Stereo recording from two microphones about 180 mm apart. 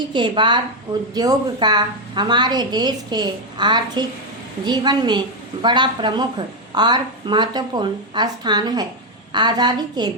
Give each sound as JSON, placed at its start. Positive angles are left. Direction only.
{"t": 0.1, "sound": "a woman's voice", "side_deg": -25}